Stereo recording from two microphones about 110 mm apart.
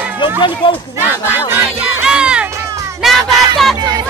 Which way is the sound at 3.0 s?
Centre (ahead or behind).